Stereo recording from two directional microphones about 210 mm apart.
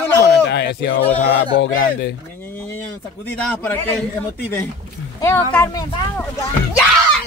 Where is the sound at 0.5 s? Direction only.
55° left (ahead or behind).